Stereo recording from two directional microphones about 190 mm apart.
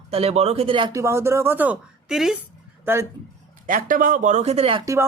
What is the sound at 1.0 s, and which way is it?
Speech, 15° right (ahead or behind).